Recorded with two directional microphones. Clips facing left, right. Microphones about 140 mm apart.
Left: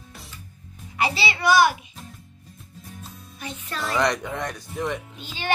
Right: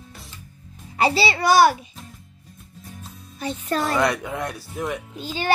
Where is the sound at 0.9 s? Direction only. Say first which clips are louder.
Right 5 dB; 35° right (ahead or behind).